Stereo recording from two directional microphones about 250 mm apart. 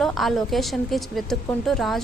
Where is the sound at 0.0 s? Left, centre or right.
Centre.